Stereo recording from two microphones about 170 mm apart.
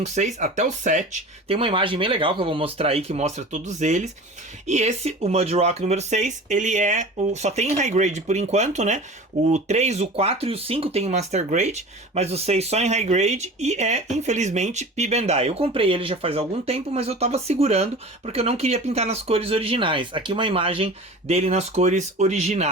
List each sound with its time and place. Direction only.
0.0 s speech: 45° right (ahead or behind)